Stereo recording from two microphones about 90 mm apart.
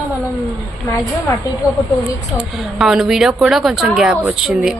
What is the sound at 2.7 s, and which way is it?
Speech, 5° right (ahead or behind).